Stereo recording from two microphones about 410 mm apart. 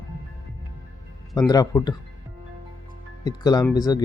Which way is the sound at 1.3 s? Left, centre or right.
Centre.